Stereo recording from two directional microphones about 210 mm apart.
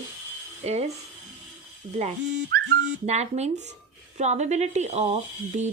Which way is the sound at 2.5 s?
50° right (ahead or behind).